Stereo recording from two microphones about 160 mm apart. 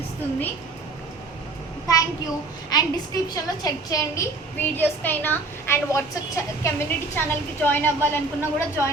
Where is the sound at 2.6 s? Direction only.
25° left (ahead or behind).